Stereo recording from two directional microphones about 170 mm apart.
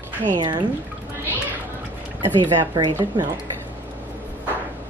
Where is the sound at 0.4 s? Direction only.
25° right (ahead or behind).